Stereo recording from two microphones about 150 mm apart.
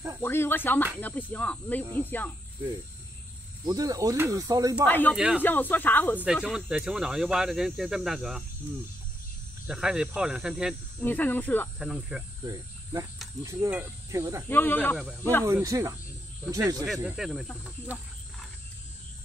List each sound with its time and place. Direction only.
0.2 s speech: 15° left (ahead or behind)
3.6 s speech: 25° right (ahead or behind)
4.8 s speech: 10° left (ahead or behind)
5.1 s speech: 5° right (ahead or behind)
5.4 s speech: 10° left (ahead or behind)
6.5 s speech: 5° right (ahead or behind)
9.7 s speech: 5° right (ahead or behind)
11.0 s speech: 10° left (ahead or behind)
11.8 s speech: 5° right (ahead or behind)
13.4 s speech: 20° right (ahead or behind)
14.5 s speech: 15° left (ahead or behind)
15.4 s speech: 20° right (ahead or behind)
17.0 s speech: 5° right (ahead or behind)